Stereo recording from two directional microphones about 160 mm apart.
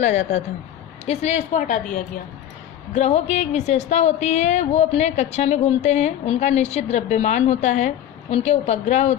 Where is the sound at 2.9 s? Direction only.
45° left (ahead or behind).